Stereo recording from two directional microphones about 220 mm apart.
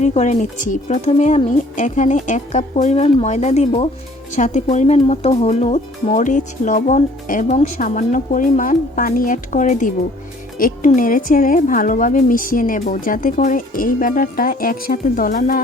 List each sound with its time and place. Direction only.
0.0 s speech: 30° left (ahead or behind)